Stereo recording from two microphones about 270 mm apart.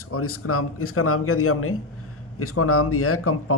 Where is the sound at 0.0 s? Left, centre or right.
Left.